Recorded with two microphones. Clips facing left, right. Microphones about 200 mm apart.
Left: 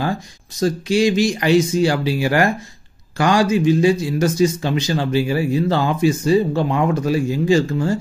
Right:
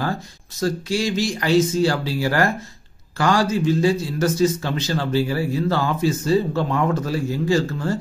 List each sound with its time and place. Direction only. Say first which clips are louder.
0.6 s speech: left 5 dB; 15° left (ahead or behind)